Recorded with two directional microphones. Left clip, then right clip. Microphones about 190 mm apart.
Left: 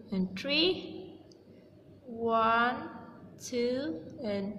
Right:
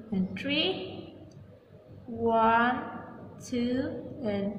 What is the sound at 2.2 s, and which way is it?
A woman's voice, 45° left (ahead or behind).